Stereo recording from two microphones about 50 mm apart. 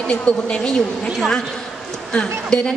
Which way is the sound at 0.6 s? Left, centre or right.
Centre.